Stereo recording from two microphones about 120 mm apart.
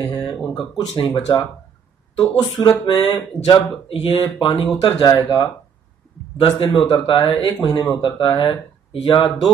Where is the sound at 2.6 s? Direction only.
40° left (ahead or behind).